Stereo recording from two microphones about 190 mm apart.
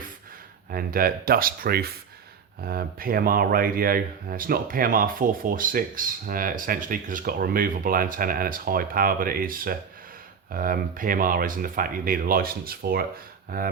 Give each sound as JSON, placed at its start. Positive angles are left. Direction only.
{"t": 0.7, "sound": "speech", "side_deg": -50}